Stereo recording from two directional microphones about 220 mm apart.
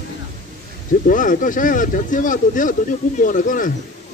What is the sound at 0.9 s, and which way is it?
Speech, 35° left (ahead or behind).